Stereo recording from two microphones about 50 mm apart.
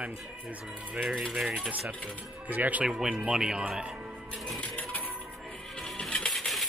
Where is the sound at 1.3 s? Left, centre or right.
Centre.